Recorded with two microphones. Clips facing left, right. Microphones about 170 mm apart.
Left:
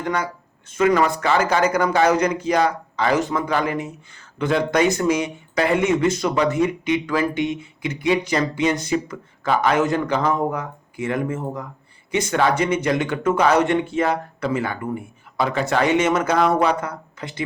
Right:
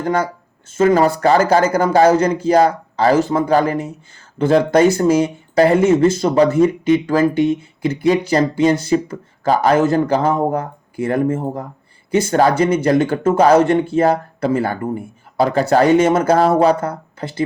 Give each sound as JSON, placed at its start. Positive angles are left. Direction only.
{"t": 0.0, "sound": "a man's voice", "side_deg": -40}